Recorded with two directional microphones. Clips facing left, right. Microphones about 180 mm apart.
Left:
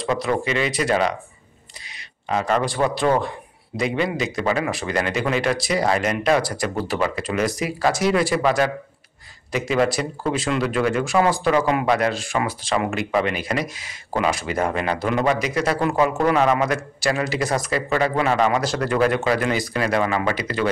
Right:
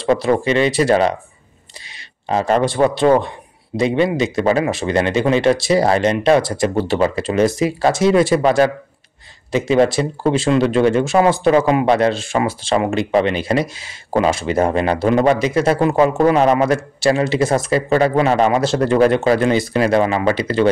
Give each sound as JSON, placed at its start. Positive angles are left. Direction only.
{"t": 0.0, "sound": "speech", "side_deg": -30}
{"t": 2.2, "sound": "speech", "side_deg": -30}